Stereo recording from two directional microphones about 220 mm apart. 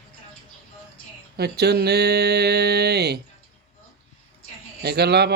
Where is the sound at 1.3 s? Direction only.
45° right (ahead or behind).